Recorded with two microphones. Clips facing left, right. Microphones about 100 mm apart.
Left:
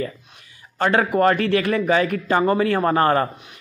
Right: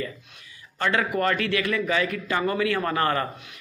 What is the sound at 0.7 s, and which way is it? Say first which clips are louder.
A man's voice: left 6 dB; 40° left (ahead or behind).